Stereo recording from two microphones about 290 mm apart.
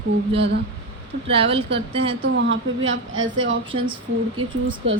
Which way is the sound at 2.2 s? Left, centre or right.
Right.